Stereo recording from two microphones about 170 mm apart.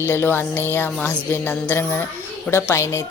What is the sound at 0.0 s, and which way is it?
Speech, 15° left (ahead or behind).